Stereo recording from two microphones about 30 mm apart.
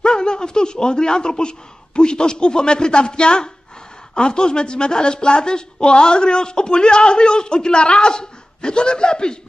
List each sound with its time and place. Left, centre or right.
0.0 s a woman's voice: left